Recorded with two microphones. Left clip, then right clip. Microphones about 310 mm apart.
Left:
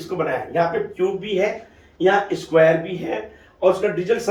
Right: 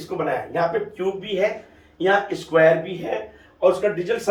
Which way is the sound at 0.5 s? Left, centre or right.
Centre.